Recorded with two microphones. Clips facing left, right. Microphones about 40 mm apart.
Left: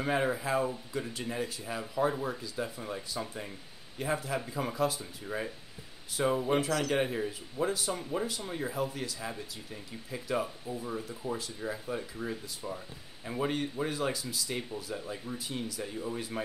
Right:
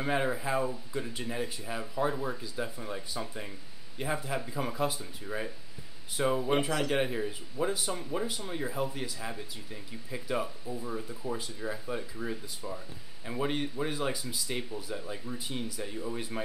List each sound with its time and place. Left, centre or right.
0.0 s speech: centre
4.7 s speech: centre
5.2 s speech: centre
7.1 s speech: centre
13.8 s speech: centre